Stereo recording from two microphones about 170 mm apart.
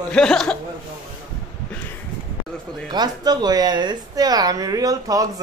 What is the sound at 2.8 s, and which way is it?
Speech, 25° right (ahead or behind).